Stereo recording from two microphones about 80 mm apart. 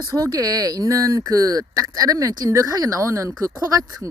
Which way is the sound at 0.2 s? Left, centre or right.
Right.